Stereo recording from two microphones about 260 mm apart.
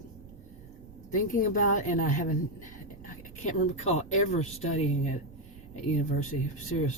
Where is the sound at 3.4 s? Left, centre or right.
Left.